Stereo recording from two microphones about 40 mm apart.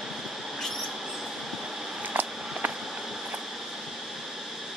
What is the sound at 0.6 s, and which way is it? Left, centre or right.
Train, centre.